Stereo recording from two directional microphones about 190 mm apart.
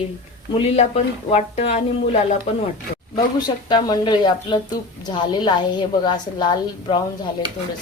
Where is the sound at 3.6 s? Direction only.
20° left (ahead or behind).